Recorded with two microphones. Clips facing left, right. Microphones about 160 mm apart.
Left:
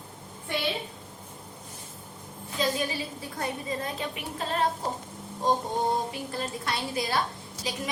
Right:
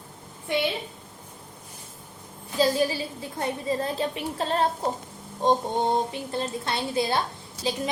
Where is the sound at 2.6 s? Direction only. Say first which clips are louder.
Right 6 dB; 35° right (ahead or behind).